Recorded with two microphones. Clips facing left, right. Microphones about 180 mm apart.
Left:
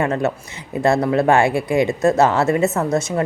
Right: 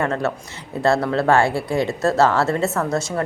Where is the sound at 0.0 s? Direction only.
15° left (ahead or behind).